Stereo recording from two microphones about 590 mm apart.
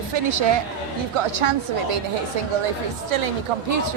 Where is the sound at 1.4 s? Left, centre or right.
Right.